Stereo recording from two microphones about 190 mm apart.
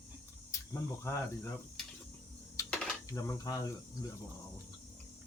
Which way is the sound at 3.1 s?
15° left (ahead or behind).